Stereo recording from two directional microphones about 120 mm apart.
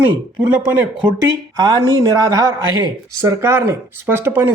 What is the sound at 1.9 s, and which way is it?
Speech, 30° right (ahead or behind).